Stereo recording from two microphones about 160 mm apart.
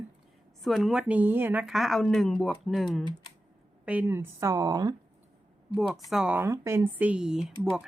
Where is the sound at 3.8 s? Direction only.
10° right (ahead or behind).